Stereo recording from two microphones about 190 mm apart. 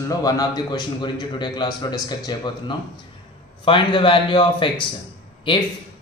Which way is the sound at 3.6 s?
25° left (ahead or behind).